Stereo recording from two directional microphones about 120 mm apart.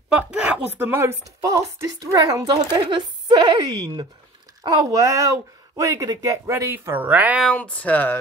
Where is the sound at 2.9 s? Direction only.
45° right (ahead or behind); by 7.4 s 15° right (ahead or behind).